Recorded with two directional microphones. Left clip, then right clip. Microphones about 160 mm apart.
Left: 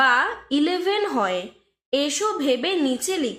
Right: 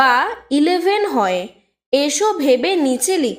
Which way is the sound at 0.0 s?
40° right (ahead or behind).